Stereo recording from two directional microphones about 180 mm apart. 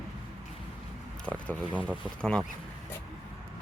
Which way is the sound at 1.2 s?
5° left (ahead or behind).